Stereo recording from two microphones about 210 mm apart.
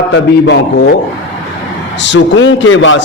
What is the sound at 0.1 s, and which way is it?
Speech, 55° left (ahead or behind).